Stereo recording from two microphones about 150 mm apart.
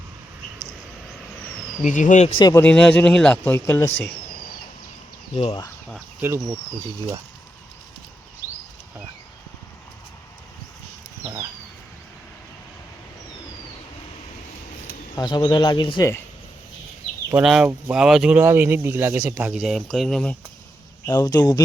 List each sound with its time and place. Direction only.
1.8 s speech: 55° left (ahead or behind)
2.4 s speech: 25° left (ahead or behind)
2.6 s speech: 5° left (ahead or behind)
5.3 s speech: 45° left (ahead or behind)
6.2 s speech: 15° right (ahead or behind)
15.1 s speech: 25° left (ahead or behind)
17.4 s speech: centre (ahead or behind)
21.1 s speech: 25° left (ahead or behind)